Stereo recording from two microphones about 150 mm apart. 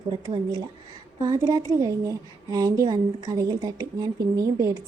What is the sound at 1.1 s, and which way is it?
A woman's voice, 20° right (ahead or behind).